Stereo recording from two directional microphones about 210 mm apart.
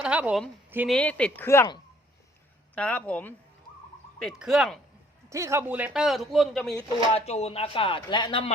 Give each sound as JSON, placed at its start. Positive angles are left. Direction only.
{"t": 0.0, "sound": "a woman's voice", "side_deg": -5}
{"t": 0.9, "sound": "speech", "side_deg": 5}
{"t": 2.7, "sound": "speech", "side_deg": 5}
{"t": 5.3, "sound": "speech", "side_deg": -15}
{"t": 7.1, "sound": "speech", "side_deg": 30}